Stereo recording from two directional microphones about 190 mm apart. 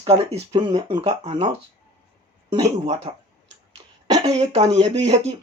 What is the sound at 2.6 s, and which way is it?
Speech, 35° right (ahead or behind).